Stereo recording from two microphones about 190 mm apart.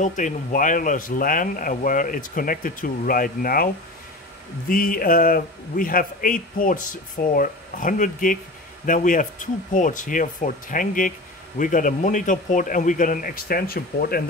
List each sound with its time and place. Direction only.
0.0 s speech: 40° left (ahead or behind)